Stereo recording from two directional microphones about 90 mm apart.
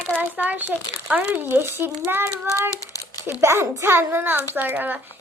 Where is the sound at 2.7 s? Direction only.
40° left (ahead or behind).